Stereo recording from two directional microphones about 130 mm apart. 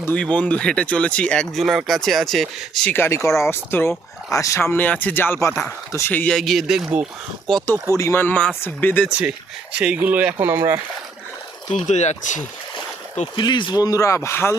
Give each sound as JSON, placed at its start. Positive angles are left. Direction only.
{"t": 0.0, "sound": "speech", "side_deg": 10}
{"t": 2.9, "sound": "speech", "side_deg": 20}
{"t": 6.3, "sound": "speech", "side_deg": 0}
{"t": 7.9, "sound": "speech", "side_deg": 20}
{"t": 9.0, "sound": "speech", "side_deg": -10}
{"t": 11.7, "sound": "speech", "side_deg": 65}
{"t": 13.3, "sound": "speech", "side_deg": 35}
{"t": 13.8, "sound": "speech", "side_deg": 25}